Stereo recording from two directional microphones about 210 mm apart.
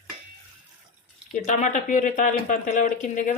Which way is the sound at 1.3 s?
35° left (ahead or behind).